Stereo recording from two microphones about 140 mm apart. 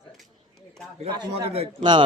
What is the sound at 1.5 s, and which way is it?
Speech, 40° right (ahead or behind).